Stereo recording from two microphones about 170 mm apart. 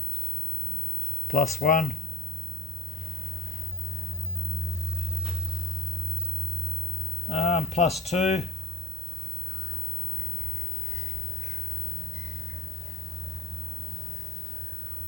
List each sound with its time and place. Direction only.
1.3 s speech: 60° left (ahead or behind)
7.3 s a sound: 40° left (ahead or behind)
8.0 s speech: 40° left (ahead or behind)